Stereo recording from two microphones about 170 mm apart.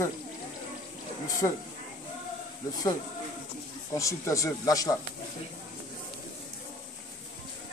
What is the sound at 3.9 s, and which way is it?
Speech, 20° left (ahead or behind).